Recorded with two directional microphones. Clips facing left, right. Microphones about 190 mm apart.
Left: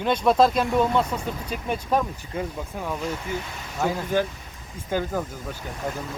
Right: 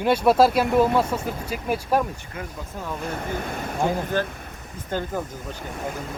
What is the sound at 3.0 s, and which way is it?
Speech, 55° right (ahead or behind).